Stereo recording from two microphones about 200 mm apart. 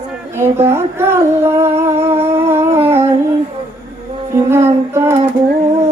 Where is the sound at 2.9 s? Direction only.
10° right (ahead or behind).